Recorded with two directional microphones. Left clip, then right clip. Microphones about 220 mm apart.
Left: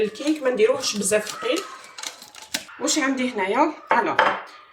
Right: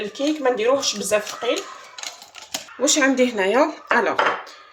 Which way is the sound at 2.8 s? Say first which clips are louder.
Right 6 dB; 45° right (ahead or behind).